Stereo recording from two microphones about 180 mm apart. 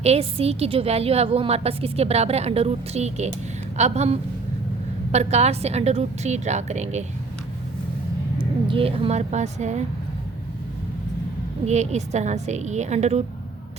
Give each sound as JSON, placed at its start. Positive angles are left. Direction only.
{"t": 0.0, "sound": "a woman's voice", "side_deg": -35}
{"t": 8.6, "sound": "a woman's voice", "side_deg": -30}
{"t": 11.6, "sound": "a woman's voice", "side_deg": -40}